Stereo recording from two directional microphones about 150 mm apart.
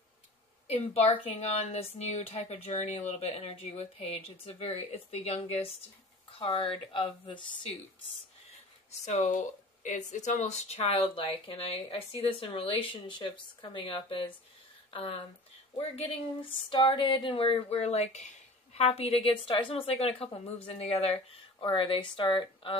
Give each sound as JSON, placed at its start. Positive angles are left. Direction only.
{"t": 0.7, "sound": "a woman's voice", "side_deg": 45}
{"t": 9.0, "sound": "speech", "side_deg": 55}